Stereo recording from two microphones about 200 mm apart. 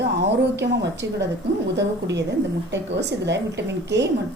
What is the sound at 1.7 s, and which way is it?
A woman's voice, 60° right (ahead or behind).